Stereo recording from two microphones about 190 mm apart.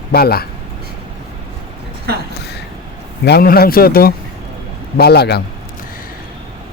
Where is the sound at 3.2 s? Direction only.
55° left (ahead or behind).